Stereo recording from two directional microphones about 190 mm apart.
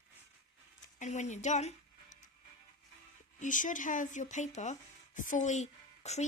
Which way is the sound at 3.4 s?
45° left (ahead or behind).